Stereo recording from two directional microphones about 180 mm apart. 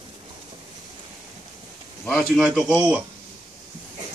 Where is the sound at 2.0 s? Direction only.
Centre (ahead or behind).